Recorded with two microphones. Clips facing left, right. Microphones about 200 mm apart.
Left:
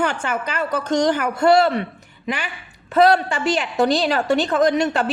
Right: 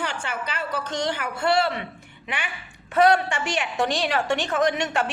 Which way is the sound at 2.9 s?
35° left (ahead or behind).